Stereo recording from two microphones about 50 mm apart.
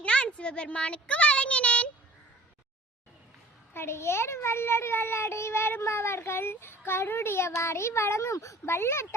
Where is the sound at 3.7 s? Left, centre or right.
Left.